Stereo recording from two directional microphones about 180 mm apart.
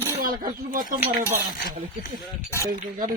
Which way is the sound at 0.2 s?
50° right (ahead or behind).